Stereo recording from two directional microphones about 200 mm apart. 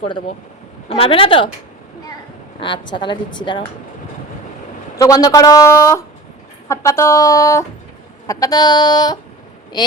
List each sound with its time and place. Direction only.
0.9 s a woman's voice: 30° left (ahead or behind)
2.6 s a woman's voice: 25° left (ahead or behind)
4.9 s a woman's voice: 20° left (ahead or behind)